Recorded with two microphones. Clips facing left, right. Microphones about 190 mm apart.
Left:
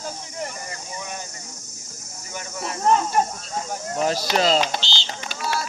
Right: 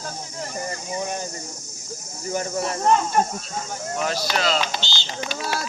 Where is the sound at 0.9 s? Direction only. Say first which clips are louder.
Right 7 dB; 40° right (ahead or behind).